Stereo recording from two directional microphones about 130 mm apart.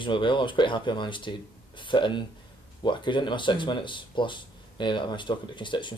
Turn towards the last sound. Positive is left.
turn(degrees=40)  # may be behind; listen again after turning